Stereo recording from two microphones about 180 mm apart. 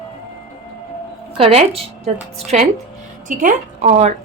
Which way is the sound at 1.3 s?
35° right (ahead or behind).